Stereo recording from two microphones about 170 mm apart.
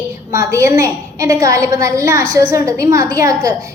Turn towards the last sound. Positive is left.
turn(degrees=-20)  # may be behind; listen again after turning